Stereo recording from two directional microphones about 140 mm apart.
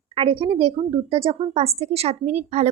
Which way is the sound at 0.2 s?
45° right (ahead or behind).